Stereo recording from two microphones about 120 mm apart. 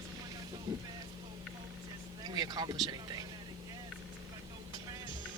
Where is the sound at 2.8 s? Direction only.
35° right (ahead or behind).